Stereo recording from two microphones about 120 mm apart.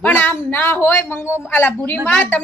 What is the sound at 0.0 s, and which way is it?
A woman's voice, 15° left (ahead or behind).